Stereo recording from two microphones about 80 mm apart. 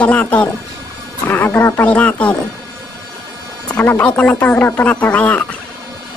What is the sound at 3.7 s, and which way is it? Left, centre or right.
Speech, centre.